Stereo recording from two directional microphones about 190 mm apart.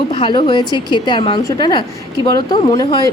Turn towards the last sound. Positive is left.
turn(degrees=20)  # may be behind; listen again after turning